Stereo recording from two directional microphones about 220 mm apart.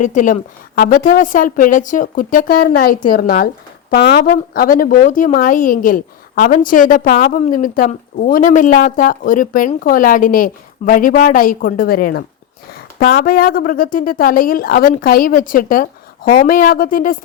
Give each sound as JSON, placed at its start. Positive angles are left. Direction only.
{"t": 0.0, "sound": "a woman's voice", "side_deg": 35}